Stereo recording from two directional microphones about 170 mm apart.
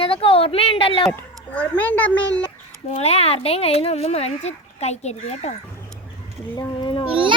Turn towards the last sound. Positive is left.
turn(degrees=-30)  # may be behind; listen again after turning